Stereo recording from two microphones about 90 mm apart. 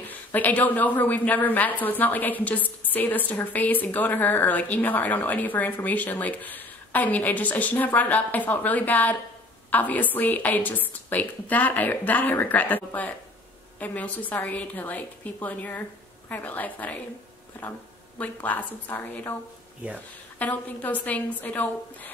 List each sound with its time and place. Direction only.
0.1 s a woman's voice: 20° left (ahead or behind)
20.3 s a woman's voice: 20° left (ahead or behind)